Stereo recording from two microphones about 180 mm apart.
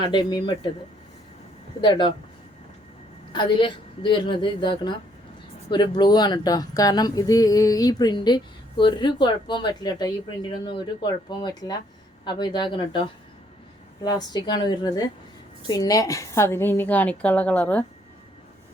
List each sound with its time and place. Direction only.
0.0 s speech: 25° left (ahead or behind)
1.8 s speech: 25° left (ahead or behind)
3.3 s speech: 25° left (ahead or behind)
14.0 s a woman's voice: 20° left (ahead or behind)